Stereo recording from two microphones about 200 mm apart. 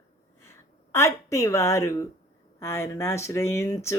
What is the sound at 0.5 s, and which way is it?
Speech, 15° left (ahead or behind).